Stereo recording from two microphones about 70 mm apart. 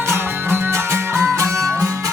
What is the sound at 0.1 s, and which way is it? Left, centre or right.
Music, right.